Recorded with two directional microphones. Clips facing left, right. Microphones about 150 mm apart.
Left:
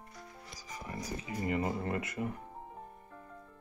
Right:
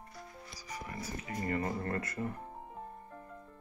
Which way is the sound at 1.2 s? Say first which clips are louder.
Left 1 dB; 15° left (ahead or behind).